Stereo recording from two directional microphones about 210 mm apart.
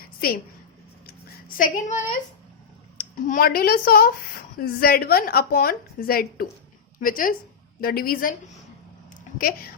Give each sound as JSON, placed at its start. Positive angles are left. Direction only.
{"t": 1.0, "sound": "a woman's voice", "side_deg": 40}
{"t": 9.4, "sound": "a woman's voice", "side_deg": 45}